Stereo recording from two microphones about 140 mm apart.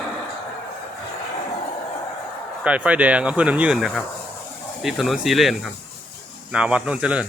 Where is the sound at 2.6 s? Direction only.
10° right (ahead or behind).